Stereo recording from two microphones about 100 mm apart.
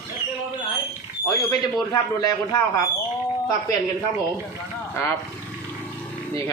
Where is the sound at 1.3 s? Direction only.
35° left (ahead or behind).